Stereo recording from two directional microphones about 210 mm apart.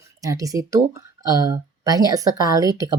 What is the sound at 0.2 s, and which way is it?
Speech, 15° right (ahead or behind).